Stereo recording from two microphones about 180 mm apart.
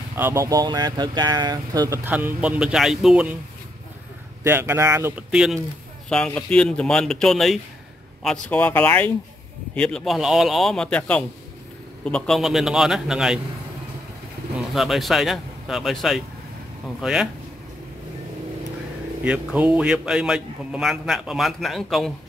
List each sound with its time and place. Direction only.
0.2 s speech: 15° right (ahead or behind)
4.4 s speech: 15° right (ahead or behind)
6.0 s a man's voice: 5° left (ahead or behind)
14.6 s a man's voice: centre (ahead or behind)
19.2 s a man's voice: 5° right (ahead or behind)